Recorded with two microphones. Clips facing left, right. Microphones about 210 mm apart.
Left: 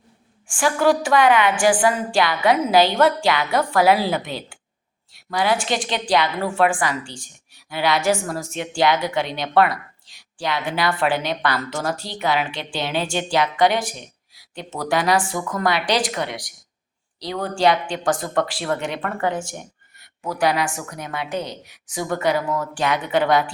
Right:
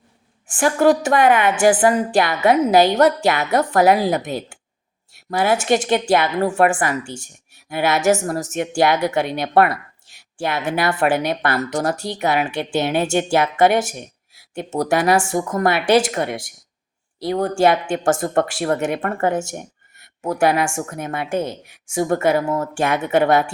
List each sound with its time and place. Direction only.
0.8 s a woman's voice: 50° right (ahead or behind)
5.3 s a woman's voice: 50° right (ahead or behind)
22.4 s speech: 25° right (ahead or behind)
22.6 s a woman's voice: 50° right (ahead or behind)